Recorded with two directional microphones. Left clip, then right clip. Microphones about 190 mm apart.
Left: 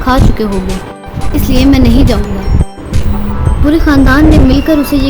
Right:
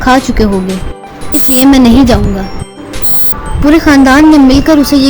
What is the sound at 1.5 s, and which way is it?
Speech, 35° right (ahead or behind).